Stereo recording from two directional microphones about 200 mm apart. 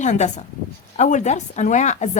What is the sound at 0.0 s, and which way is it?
Speech, 35° left (ahead or behind).